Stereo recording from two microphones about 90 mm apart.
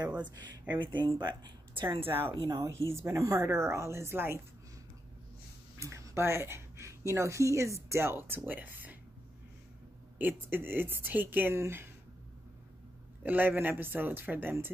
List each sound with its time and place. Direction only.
0.0 s a sound: 20° right (ahead or behind)
0.7 s speech: 60° right (ahead or behind)
2.0 s speech: 25° right (ahead or behind)
2.4 s speech: 35° right (ahead or behind)
5.8 s speech: 35° right (ahead or behind)
10.1 s speech: 20° right (ahead or behind)
13.2 s speech: 20° right (ahead or behind)